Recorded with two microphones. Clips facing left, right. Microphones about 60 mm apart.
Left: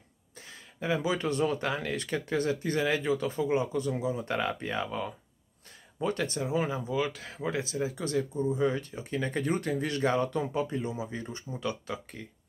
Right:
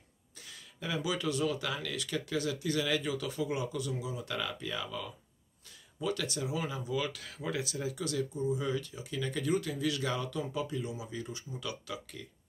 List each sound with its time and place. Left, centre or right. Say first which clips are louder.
0.4 s speech: left 6 dB; left